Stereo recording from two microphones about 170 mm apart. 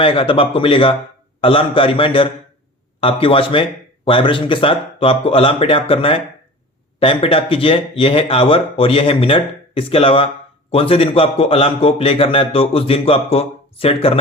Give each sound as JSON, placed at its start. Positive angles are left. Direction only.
{"t": 0.0, "sound": "a man's voice", "side_deg": 30}